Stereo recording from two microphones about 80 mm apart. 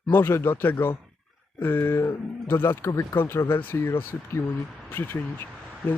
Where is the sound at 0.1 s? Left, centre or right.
Left.